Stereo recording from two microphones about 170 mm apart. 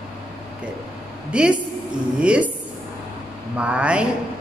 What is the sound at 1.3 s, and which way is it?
A woman's voice, 5° right (ahead or behind).